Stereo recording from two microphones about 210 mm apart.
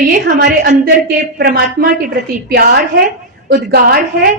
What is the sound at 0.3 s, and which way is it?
A woman's voice, 50° right (ahead or behind).